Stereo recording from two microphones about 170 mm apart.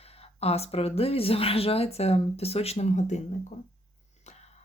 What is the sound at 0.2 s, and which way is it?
Speech, 35° left (ahead or behind).